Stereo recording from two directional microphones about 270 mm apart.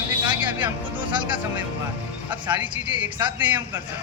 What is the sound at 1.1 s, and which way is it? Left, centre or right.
Speech, centre.